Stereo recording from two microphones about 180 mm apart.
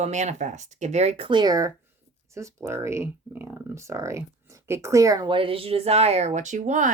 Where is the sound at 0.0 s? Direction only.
40° right (ahead or behind).